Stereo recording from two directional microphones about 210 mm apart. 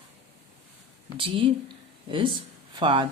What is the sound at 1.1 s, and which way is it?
Speech, 25° right (ahead or behind).